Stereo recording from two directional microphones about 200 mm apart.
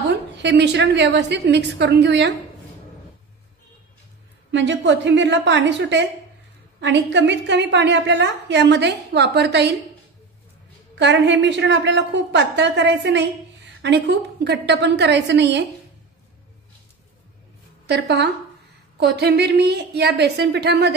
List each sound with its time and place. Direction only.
0.4 s a woman's voice: 60° right (ahead or behind)
4.5 s a woman's voice: 65° right (ahead or behind)
11.0 s a woman's voice: 60° right (ahead or behind)
17.8 s a woman's voice: 55° right (ahead or behind)